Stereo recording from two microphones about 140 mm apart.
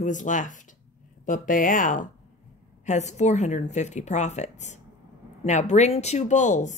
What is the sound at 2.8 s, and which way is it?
Speech, 55° left (ahead or behind).